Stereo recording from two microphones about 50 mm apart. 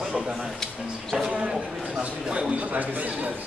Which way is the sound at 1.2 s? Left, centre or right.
Centre.